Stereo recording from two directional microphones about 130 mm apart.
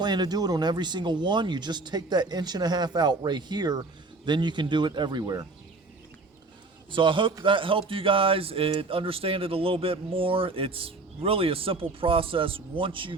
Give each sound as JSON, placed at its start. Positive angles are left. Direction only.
{"t": 0.0, "sound": "speech", "side_deg": -35}
{"t": 6.9, "sound": "speech", "side_deg": -40}